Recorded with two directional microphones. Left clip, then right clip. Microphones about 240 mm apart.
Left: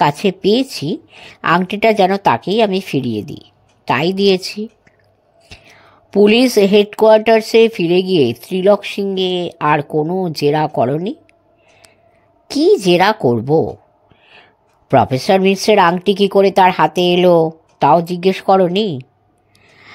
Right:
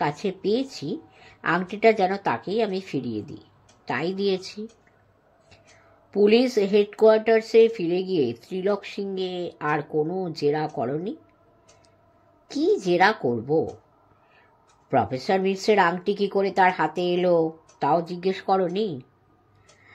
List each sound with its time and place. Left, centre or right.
0.0 s speech: left
6.0 s speech: left
12.4 s speech: left